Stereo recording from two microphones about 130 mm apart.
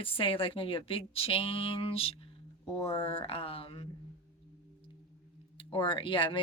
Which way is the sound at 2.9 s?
40° left (ahead or behind).